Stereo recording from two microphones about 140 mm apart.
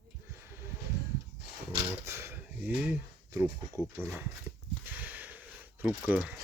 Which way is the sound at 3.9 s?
15° right (ahead or behind).